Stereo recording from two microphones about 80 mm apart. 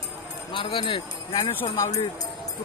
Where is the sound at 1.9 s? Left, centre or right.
Left.